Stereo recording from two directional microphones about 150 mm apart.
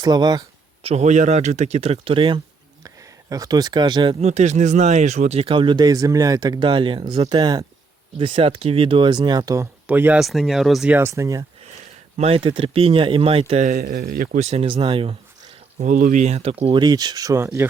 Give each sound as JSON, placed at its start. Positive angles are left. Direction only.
{"t": 0.0, "sound": "speech", "side_deg": -30}
{"t": 0.8, "sound": "speech", "side_deg": -45}
{"t": 2.8, "sound": "speech", "side_deg": -25}
{"t": 8.2, "sound": "speech", "side_deg": -35}
{"t": 9.8, "sound": "speech", "side_deg": -10}
{"t": 10.9, "sound": "speech", "side_deg": -20}
{"t": 12.1, "sound": "speech", "side_deg": -40}
{"t": 13.7, "sound": "speech", "side_deg": -90}
{"t": 14.3, "sound": "speech", "side_deg": -45}
{"t": 15.8, "sound": "speech", "side_deg": -60}
{"t": 16.8, "sound": "speech", "side_deg": -25}